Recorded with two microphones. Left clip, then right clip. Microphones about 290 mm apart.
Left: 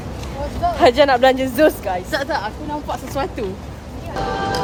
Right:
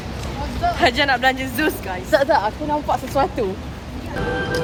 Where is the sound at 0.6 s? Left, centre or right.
Left.